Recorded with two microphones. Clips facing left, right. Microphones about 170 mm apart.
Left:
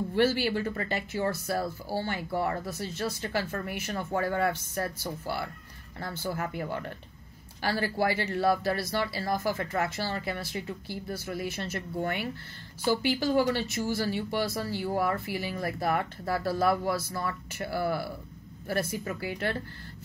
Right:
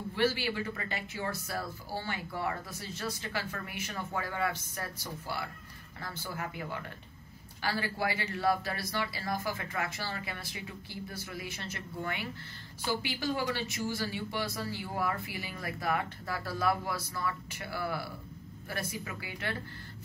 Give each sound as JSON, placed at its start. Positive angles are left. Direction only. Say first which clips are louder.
{"t": 0.1, "sound": "speech", "louder": "left 4 dB", "side_deg": 45}
{"t": 6.2, "sound": "speech", "louder": "left 7 dB", "side_deg": 45}